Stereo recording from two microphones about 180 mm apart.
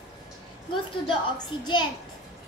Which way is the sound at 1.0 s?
25° left (ahead or behind).